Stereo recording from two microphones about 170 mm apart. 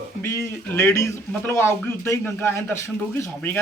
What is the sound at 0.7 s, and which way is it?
A man's voice, 15° left (ahead or behind).